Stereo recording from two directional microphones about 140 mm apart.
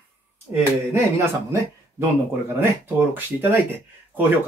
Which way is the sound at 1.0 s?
20° right (ahead or behind).